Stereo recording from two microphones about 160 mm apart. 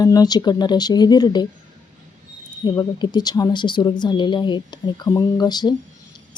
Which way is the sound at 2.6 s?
25° left (ahead or behind).